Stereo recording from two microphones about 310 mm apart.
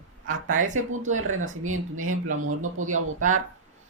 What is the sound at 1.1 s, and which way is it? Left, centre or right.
Speech, right.